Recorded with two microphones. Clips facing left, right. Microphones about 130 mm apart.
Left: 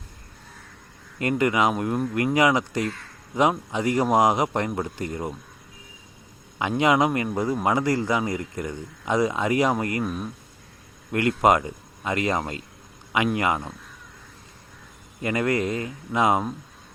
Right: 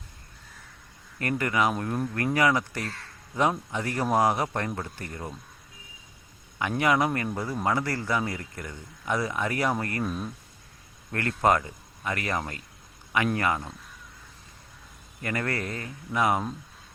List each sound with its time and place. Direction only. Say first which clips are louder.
1.2 s a man's voice: left 4 dB; 20° left (ahead or behind)
6.6 s a man's voice: left 4 dB; 20° left (ahead or behind)
10.0 s a man's voice: left 2 dB; 5° left (ahead or behind)
15.2 s a man's voice: left 7 dB; 20° left (ahead or behind)